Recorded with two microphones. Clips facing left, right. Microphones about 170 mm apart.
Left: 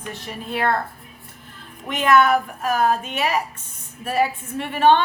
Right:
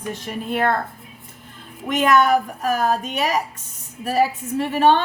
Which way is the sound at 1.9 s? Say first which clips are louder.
Right 1 dB; 45° right (ahead or behind).